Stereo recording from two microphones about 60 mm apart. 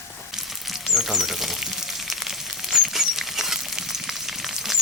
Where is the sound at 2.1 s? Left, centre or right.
Centre.